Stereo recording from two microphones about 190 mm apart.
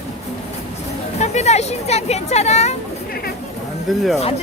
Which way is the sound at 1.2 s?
35° left (ahead or behind).